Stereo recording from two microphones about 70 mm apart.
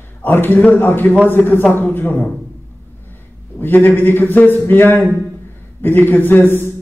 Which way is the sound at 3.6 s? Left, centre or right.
Left.